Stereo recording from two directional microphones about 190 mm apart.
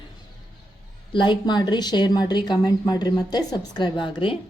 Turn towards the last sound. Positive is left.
turn(degrees=25)  # may be behind; listen again after turning